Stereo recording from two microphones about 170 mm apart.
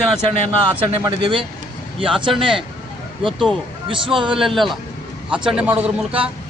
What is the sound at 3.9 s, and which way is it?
Speech, 30° right (ahead or behind).